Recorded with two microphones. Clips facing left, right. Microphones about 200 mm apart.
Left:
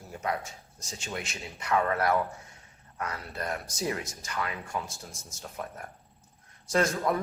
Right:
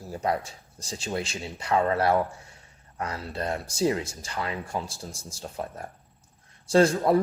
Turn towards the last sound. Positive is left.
turn(degrees=-30)  # may be behind; listen again after turning